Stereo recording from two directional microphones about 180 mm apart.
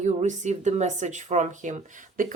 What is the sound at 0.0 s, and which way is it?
Speech, 40° right (ahead or behind).